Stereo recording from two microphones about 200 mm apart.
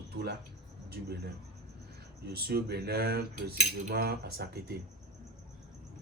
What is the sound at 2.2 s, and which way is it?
Cutlery, 50° right (ahead or behind).